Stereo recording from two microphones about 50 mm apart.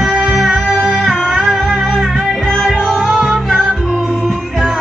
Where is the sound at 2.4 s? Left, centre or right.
Centre.